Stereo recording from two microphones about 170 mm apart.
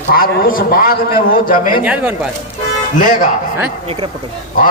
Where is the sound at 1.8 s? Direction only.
10° right (ahead or behind).